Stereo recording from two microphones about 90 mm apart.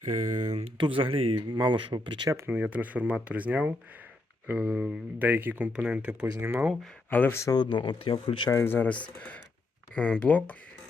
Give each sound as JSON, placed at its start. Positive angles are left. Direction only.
{"t": 0.6, "sound": "speech", "side_deg": -75}
{"t": 2.3, "sound": "speech", "side_deg": -20}
{"t": 6.4, "sound": "speech", "side_deg": -25}
{"t": 7.1, "sound": "speech", "side_deg": 25}
{"t": 7.5, "sound": "speech", "side_deg": 60}
{"t": 8.4, "sound": "speech", "side_deg": 30}
{"t": 8.9, "sound": "speech", "side_deg": 15}